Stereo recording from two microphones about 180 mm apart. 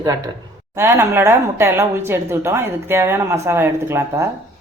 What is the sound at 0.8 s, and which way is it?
Speech, 15° right (ahead or behind).